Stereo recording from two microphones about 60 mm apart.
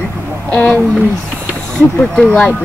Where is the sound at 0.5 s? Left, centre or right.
Centre.